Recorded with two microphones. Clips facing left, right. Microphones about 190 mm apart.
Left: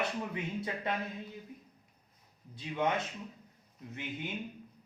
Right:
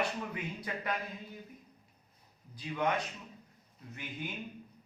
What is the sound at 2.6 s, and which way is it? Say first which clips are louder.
Speech: left 1 dB; 25° left (ahead or behind).